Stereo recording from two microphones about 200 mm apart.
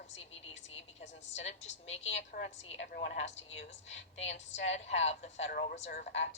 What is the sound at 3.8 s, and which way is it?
Speech, 65° left (ahead or behind).